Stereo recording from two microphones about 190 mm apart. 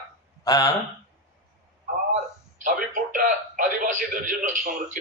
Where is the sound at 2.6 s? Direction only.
45° right (ahead or behind).